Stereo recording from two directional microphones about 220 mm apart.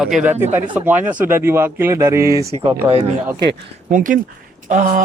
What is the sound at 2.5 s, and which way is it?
Speech, 25° right (ahead or behind).